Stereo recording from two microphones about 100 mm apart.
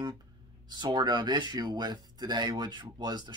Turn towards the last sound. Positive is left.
turn(degrees=-45)  # may be behind; listen again after turning